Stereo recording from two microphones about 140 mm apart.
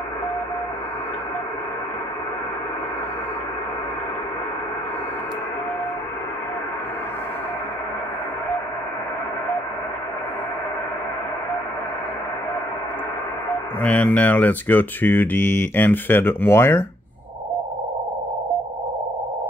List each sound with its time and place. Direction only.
13.8 s speech: 10° left (ahead or behind)